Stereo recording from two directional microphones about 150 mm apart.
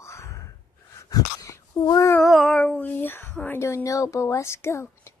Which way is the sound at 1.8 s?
20° left (ahead or behind).